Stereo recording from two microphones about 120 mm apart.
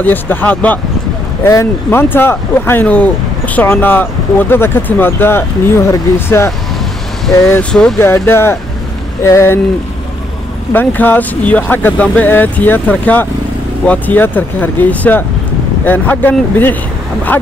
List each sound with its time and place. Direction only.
0.0 s speech: 15° left (ahead or behind)
8.0 s speech: 20° left (ahead or behind)
10.7 s speech: 15° left (ahead or behind)